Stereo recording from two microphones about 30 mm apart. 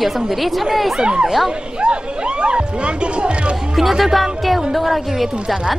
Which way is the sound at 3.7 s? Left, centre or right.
Centre.